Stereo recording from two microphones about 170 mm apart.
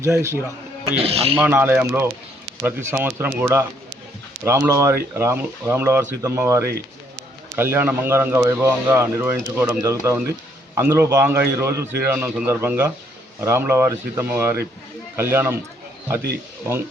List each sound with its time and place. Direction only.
0.0 s speech: 15° right (ahead or behind)
0.9 s speech: 35° right (ahead or behind)
1.4 s speech: 10° right (ahead or behind)